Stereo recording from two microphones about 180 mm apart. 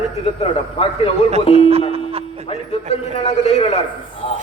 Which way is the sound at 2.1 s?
30° right (ahead or behind).